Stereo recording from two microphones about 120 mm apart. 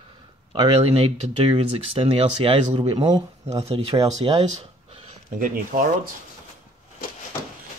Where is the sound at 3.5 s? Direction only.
55° right (ahead or behind).